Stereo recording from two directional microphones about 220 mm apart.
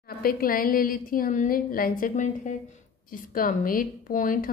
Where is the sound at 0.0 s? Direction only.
40° left (ahead or behind).